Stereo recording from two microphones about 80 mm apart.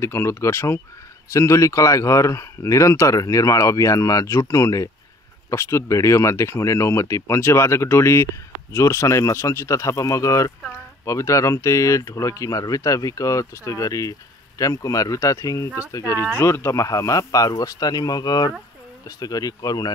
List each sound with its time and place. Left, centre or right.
0.0 s speech: left